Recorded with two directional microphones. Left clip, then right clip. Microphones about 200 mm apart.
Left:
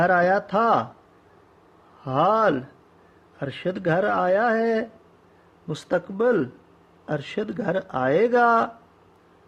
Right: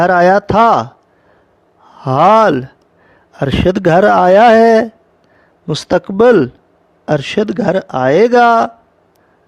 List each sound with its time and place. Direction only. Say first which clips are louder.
0.0 s speech: right 10 dB; 55° right (ahead or behind)
2.0 s speech: right 12 dB; 55° right (ahead or behind)
5.6 s speech: right 11 dB; 45° right (ahead or behind)